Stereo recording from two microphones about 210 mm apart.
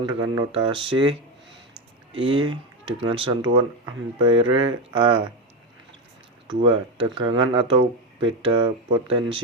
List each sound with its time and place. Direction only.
0.0 s speech: 20° right (ahead or behind)
2.2 s speech: 25° right (ahead or behind)
6.5 s speech: 25° right (ahead or behind)